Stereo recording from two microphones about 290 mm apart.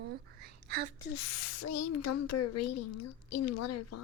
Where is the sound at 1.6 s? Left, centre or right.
Left.